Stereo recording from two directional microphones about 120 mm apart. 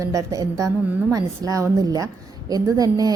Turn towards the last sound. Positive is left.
turn(degrees=-30)  # may be behind; listen again after turning